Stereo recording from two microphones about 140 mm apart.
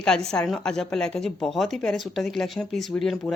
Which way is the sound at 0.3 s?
5° left (ahead or behind).